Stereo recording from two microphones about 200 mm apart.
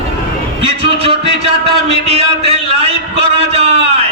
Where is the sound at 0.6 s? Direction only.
30° right (ahead or behind).